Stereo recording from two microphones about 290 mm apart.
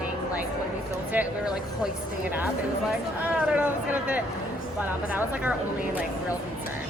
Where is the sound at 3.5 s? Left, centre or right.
Centre.